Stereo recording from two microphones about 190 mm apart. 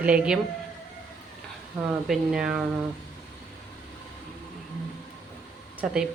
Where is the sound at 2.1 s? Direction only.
5° right (ahead or behind).